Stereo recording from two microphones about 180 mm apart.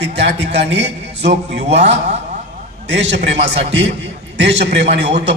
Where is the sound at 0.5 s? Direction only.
70° right (ahead or behind).